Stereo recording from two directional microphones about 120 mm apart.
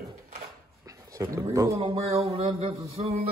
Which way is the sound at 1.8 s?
50° right (ahead or behind).